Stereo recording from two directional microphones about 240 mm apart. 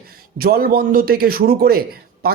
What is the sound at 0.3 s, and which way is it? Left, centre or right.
Speech, right.